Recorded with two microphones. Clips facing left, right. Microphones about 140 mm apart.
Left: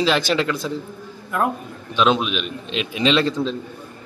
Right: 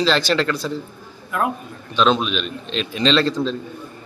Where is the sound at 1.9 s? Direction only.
10° left (ahead or behind).